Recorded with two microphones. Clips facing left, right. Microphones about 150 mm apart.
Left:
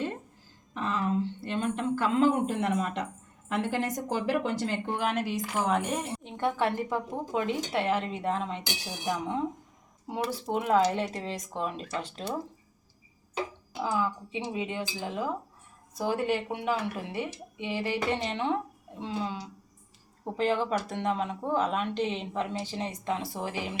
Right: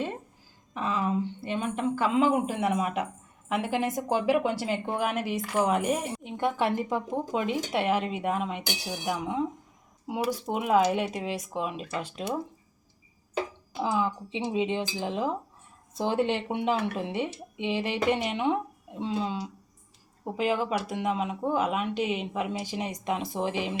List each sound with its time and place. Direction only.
0.7 s a woman's voice: 5° right (ahead or behind)
13.9 s speech: 20° right (ahead or behind)
20.3 s a woman's voice: 10° right (ahead or behind)